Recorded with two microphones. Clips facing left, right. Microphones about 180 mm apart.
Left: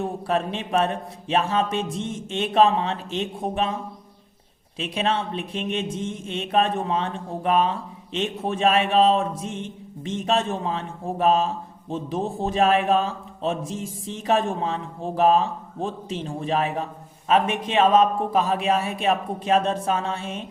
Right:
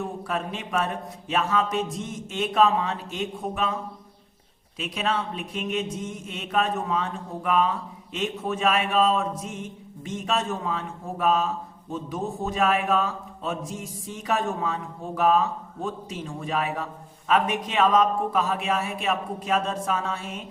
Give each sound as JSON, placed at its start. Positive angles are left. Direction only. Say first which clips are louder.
{"t": 0.0, "sound": "a man's voice", "louder": "left 5 dB", "side_deg": 30}
{"t": 4.8, "sound": "a man's voice", "louder": "left 3 dB", "side_deg": 30}